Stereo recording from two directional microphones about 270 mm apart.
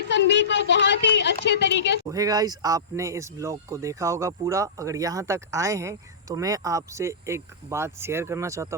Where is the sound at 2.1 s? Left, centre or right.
Centre.